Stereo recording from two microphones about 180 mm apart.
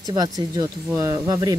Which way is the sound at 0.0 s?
20° right (ahead or behind).